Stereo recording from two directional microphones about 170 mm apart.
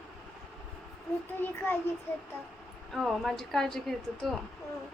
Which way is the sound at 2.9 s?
Centre (ahead or behind).